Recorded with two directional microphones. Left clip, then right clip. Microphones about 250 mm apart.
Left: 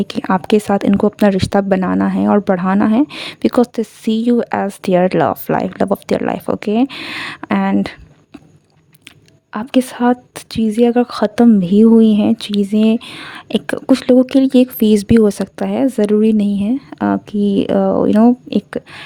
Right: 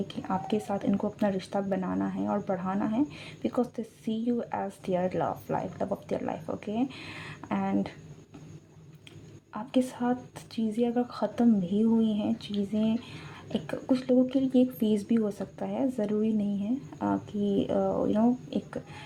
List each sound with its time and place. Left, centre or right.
0.1 s speech: left
9.5 s speech: left